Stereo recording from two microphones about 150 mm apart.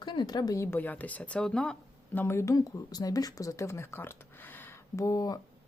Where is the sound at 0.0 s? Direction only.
30° left (ahead or behind).